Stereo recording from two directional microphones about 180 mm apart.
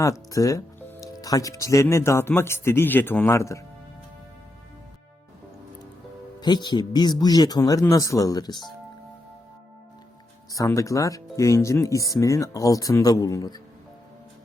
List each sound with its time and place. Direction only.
0.0 s speech: 15° left (ahead or behind)
6.4 s speech: 25° left (ahead or behind)
10.5 s speech: 20° left (ahead or behind)